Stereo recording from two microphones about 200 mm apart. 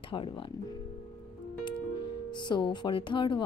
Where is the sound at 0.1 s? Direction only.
25° left (ahead or behind).